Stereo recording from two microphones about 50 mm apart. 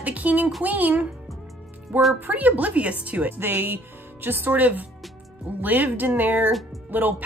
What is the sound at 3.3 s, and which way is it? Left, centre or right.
Speech, right.